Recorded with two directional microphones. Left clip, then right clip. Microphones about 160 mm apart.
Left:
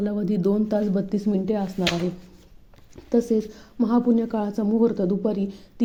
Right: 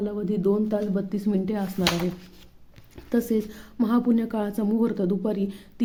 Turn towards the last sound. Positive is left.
turn(degrees=0)  # may be behind; listen again after turning